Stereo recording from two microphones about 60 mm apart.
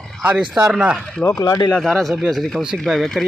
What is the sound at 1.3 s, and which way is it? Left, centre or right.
Speech, left.